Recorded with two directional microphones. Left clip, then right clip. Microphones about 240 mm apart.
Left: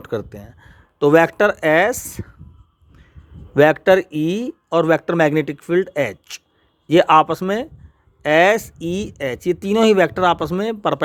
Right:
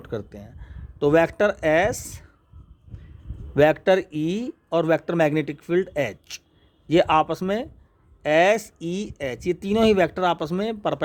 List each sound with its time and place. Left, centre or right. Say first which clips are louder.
0.0 s speech: left 7 dB; centre
3.5 s speech: left 5 dB; centre